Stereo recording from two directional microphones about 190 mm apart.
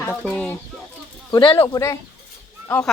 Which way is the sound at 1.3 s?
25° left (ahead or behind).